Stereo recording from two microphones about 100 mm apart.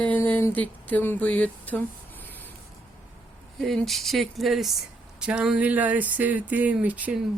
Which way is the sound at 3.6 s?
Centre (ahead or behind).